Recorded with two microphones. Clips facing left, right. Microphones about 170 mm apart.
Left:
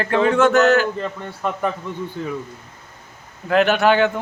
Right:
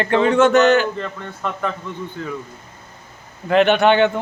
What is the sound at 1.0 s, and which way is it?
Speech, 10° left (ahead or behind).